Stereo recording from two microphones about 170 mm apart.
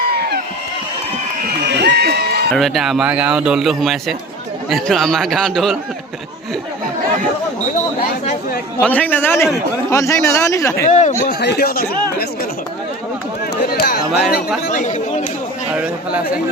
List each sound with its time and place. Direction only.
1.8 s a sound: 75° right (ahead or behind)
2.6 s speech: centre (ahead or behind)
8.8 s speech: 10° left (ahead or behind)
10.8 s speech: 45° left (ahead or behind)
11.3 s speech: 70° left (ahead or behind)
13.7 s chatter: 65° left (ahead or behind)
14.7 s chatter: 50° left (ahead or behind)
15.7 s a sound: 10° right (ahead or behind)